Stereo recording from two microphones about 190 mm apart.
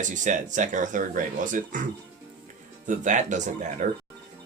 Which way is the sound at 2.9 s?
40° right (ahead or behind).